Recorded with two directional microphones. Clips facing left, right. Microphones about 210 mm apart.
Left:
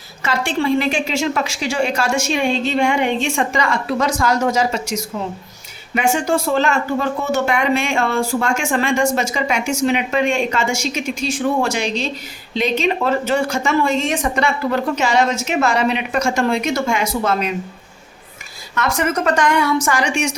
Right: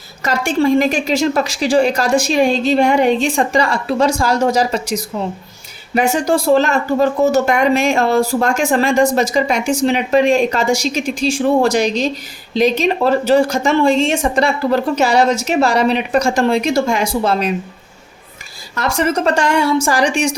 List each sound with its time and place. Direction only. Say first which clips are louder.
0.2 s speech: right 4 dB; 40° right (ahead or behind)
18.7 s speech: right 2 dB; 30° right (ahead or behind)